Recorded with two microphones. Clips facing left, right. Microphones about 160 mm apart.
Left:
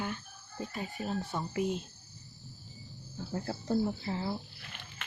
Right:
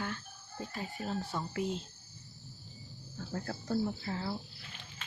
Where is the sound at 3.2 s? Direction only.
20° left (ahead or behind).